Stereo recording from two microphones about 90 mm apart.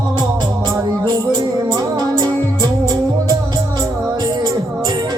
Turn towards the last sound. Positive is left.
turn(degrees=-50)  # may be behind; listen again after turning